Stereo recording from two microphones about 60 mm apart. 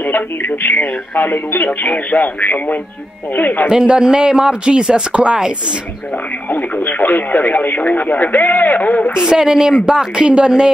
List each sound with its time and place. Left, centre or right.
0.0 s speech: left
3.6 s speech: centre
6.5 s speech: left
9.2 s speech: centre